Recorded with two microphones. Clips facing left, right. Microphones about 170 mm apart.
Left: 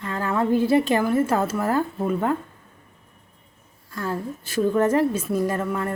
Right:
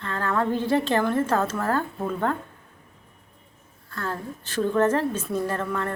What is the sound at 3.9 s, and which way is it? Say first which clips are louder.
A woman's voice: left 3 dB; 10° left (ahead or behind).